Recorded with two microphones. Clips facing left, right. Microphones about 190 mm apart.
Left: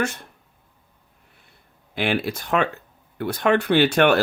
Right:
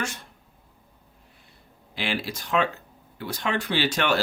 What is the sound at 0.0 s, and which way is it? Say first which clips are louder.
Speech: left 7 dB; 55° left (ahead or behind).